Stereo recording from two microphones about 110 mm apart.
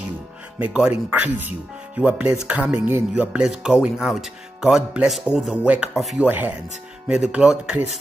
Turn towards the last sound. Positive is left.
turn(degrees=-10)  # may be behind; listen again after turning